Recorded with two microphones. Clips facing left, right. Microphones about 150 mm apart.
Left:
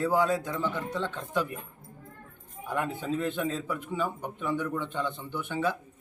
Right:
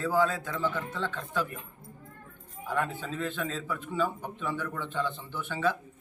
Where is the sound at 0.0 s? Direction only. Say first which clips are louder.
Left 1 dB; 15° left (ahead or behind).